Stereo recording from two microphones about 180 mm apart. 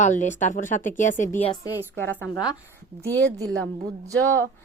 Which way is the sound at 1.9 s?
10° left (ahead or behind).